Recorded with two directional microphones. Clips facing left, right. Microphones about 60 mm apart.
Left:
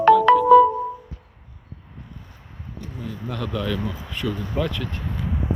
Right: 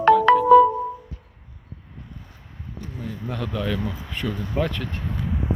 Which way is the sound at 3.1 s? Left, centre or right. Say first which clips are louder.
Left 1 dB; right.